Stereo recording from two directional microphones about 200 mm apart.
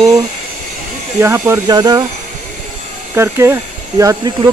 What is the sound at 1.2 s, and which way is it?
Speech, 15° right (ahead or behind).